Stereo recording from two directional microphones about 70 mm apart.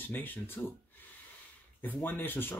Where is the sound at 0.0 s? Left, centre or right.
Left.